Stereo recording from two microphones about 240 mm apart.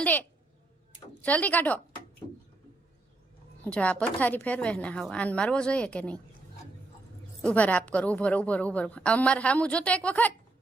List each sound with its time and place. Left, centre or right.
0.0 s a woman's voice: centre
3.6 s a woman's voice: centre
7.4 s a woman's voice: centre